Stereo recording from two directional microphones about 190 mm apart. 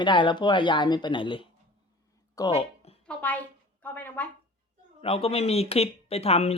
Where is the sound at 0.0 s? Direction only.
25° left (ahead or behind).